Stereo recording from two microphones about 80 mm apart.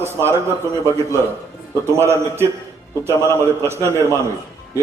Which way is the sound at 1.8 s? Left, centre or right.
Right.